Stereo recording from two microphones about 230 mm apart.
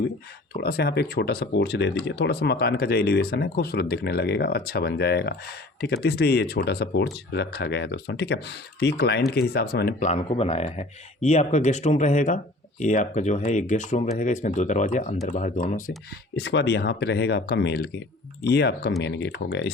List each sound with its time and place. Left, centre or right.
0.5 s speech: left
10.1 s speech: left
16.3 s speech: left